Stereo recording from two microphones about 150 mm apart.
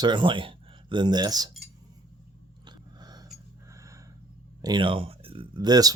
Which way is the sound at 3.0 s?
30° right (ahead or behind).